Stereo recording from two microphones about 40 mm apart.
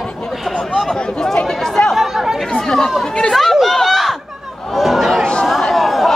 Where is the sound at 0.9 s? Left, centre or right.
Centre.